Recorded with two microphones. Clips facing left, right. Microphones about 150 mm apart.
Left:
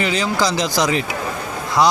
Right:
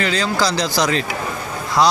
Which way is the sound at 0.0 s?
20° left (ahead or behind).